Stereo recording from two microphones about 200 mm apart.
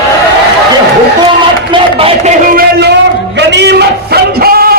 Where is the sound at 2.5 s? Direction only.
50° right (ahead or behind).